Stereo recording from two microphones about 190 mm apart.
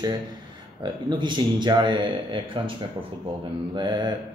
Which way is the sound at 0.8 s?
25° right (ahead or behind).